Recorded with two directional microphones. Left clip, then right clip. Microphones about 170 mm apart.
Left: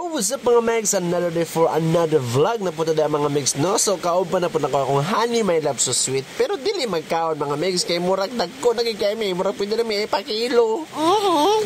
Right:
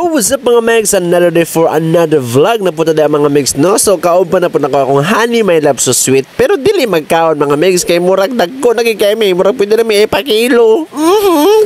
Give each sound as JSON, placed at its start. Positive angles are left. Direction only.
{"t": 0.1, "sound": "speech", "side_deg": -40}